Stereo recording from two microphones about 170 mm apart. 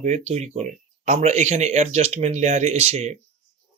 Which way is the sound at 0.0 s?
40° right (ahead or behind).